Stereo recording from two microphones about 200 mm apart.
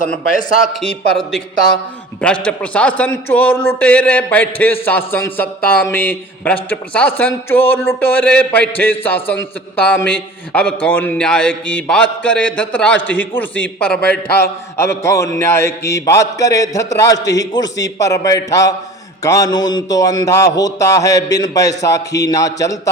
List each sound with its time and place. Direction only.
0.7 s a man's voice: centre (ahead or behind); by 22.8 s 15° left (ahead or behind)